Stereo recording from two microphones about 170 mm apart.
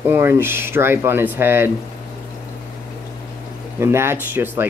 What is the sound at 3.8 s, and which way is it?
Speech, 15° right (ahead or behind).